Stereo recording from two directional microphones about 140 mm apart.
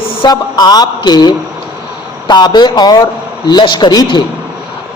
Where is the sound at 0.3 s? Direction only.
30° left (ahead or behind).